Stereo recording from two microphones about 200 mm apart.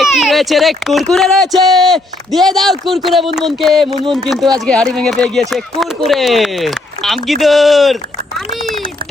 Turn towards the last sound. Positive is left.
turn(degrees=0)  # may be behind; listen again after turning